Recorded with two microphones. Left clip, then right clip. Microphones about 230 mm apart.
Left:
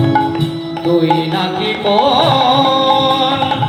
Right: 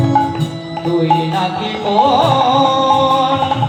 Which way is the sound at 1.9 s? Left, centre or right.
Left.